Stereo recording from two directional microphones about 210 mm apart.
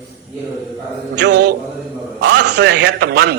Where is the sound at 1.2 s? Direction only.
50° right (ahead or behind).